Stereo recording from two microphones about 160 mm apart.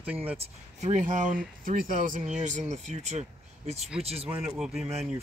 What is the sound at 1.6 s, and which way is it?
Speech, 60° right (ahead or behind).